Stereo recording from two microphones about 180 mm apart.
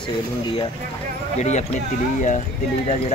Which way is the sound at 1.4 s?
40° left (ahead or behind).